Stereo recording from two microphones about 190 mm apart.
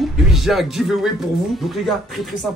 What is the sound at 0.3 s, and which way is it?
Speech, centre (ahead or behind).